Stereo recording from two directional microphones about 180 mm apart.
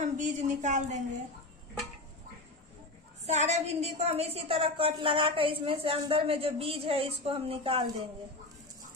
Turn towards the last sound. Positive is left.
turn(degrees=-30)  # may be behind; listen again after turning